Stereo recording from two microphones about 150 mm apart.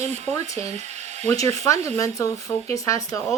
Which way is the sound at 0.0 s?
50° right (ahead or behind).